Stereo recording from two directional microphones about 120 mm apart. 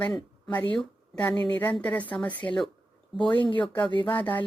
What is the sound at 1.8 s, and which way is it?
Speech, 15° left (ahead or behind).